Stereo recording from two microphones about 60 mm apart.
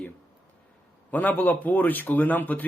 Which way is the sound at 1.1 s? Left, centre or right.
Left.